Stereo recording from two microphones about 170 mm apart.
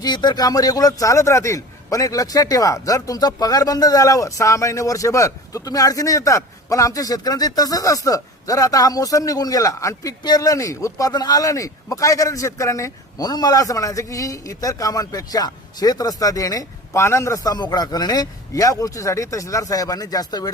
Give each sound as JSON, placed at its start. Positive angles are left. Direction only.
{"t": 0.0, "sound": "a man's voice", "side_deg": 25}